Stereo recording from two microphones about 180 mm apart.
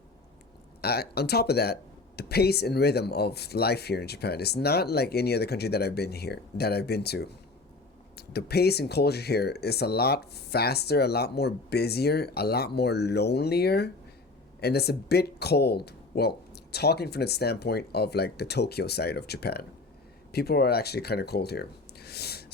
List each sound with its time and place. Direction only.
0.8 s speech: 60° left (ahead or behind)